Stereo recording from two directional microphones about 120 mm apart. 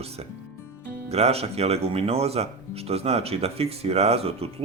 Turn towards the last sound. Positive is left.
turn(degrees=-55)  # may be behind; listen again after turning